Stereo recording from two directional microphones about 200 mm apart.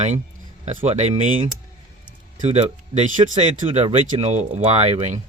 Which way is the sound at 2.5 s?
35° right (ahead or behind).